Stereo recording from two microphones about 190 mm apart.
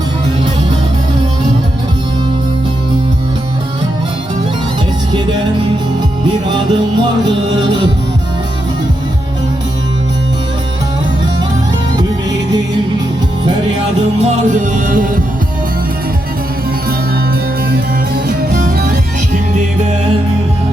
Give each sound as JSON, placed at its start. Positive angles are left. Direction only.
{"t": 11.9, "sound": "music", "side_deg": -20}
{"t": 14.2, "sound": "music", "side_deg": -40}
{"t": 17.7, "sound": "music", "side_deg": -50}